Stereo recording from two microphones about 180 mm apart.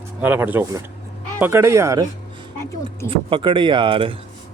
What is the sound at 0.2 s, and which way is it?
Speech, 10° right (ahead or behind).